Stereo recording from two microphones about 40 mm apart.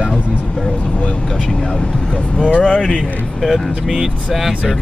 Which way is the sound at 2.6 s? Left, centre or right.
Left.